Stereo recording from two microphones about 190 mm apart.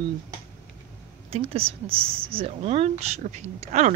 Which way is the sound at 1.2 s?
30° right (ahead or behind).